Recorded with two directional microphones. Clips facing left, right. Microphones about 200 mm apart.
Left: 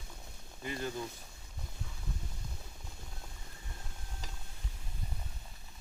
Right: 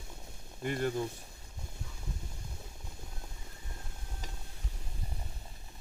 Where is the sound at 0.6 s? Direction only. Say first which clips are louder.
Right 6 dB; 55° right (ahead or behind).